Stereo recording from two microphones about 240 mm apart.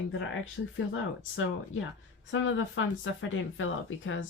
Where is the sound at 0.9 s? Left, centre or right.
Left.